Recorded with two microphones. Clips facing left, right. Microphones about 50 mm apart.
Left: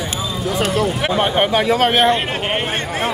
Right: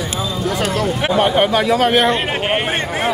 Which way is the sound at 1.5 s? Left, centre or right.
Left.